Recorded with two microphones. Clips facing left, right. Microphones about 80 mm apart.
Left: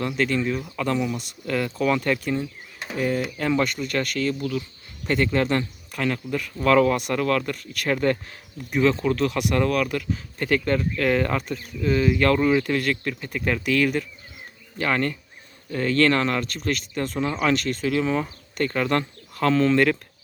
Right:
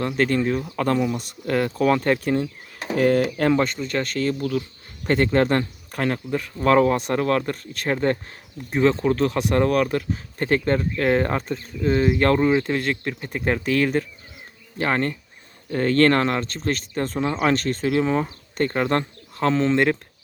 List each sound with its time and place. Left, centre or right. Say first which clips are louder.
0.2 s speech: right 4 dB; right
3.6 s speech: right 1 dB; right